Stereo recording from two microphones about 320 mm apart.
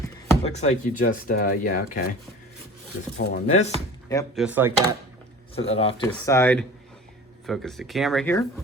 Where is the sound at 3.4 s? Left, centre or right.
Centre.